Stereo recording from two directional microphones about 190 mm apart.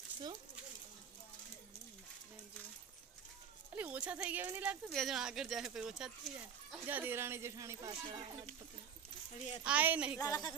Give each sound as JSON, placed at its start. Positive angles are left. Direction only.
{"t": 3.8, "sound": "speech", "side_deg": -10}
{"t": 9.6, "sound": "speech", "side_deg": -10}
{"t": 10.2, "sound": "a woman's voice", "side_deg": 20}